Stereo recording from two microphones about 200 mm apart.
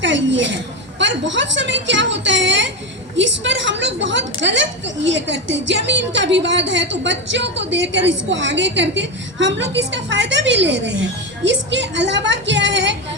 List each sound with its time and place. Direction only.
0.0 s a woman's voice: 65° right (ahead or behind)